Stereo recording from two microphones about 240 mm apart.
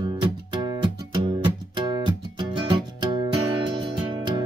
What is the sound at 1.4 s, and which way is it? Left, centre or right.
Music, centre.